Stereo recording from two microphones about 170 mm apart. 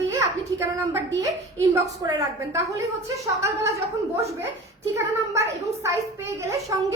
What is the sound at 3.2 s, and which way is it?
Speech, 15° right (ahead or behind).